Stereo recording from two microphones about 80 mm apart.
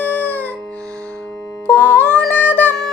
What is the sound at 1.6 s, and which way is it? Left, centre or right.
Music, left.